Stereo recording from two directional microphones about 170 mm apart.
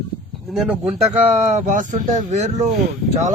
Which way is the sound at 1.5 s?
45° right (ahead or behind).